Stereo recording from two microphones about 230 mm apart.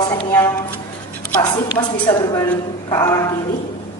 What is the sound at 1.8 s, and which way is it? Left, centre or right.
Speech, centre.